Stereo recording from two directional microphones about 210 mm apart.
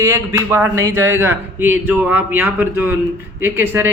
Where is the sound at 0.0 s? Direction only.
15° right (ahead or behind).